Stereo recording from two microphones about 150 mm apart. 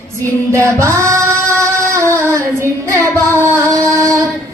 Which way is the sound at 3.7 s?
20° right (ahead or behind).